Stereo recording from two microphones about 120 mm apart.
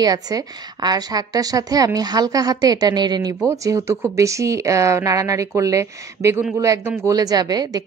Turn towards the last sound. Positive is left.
turn(degrees=-35)  # may be behind; listen again after turning